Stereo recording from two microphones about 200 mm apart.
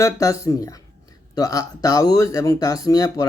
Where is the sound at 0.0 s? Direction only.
15° left (ahead or behind).